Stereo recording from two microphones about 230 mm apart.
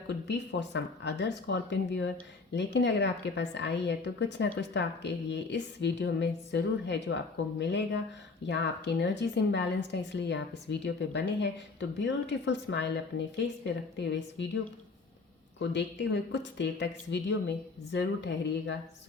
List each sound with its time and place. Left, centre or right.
0.3 s speech: left
14.1 s speech: left
15.7 s speech: left